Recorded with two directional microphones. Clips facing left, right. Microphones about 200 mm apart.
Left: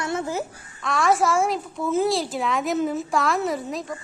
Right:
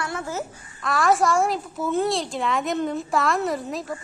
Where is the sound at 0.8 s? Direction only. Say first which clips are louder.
Even; centre (ahead or behind).